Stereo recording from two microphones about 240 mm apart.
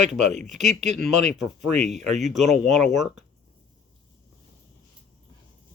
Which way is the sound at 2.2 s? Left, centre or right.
Centre.